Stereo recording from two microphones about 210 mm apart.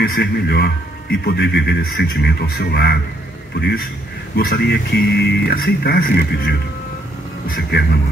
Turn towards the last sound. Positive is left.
turn(degrees=45)  # may be behind; listen again after turning